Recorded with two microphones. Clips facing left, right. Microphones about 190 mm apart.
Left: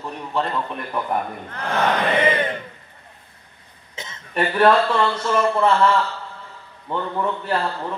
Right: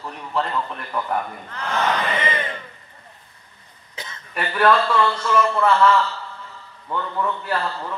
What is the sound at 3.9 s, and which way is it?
Cough, 25° left (ahead or behind).